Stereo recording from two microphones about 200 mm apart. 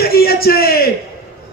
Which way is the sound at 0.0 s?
50° left (ahead or behind).